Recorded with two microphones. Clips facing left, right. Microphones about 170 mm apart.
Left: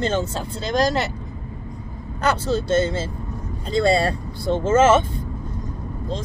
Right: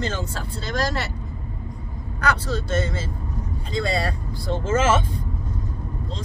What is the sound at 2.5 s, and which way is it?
Speech, 30° left (ahead or behind).